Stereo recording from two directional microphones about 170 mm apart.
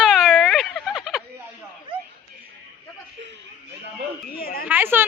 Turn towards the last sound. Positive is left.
turn(degrees=-10)  # may be behind; listen again after turning